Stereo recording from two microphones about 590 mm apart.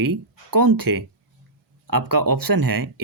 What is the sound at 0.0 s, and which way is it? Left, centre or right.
Speech, right.